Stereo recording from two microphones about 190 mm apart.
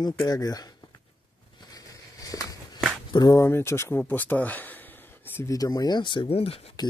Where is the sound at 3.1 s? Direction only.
20° left (ahead or behind).